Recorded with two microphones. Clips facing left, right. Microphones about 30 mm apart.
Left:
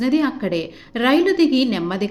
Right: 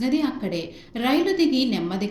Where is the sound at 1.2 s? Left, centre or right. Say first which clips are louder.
Left 3 dB; centre.